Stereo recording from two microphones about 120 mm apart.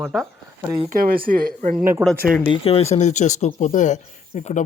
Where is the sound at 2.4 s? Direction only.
50° left (ahead or behind).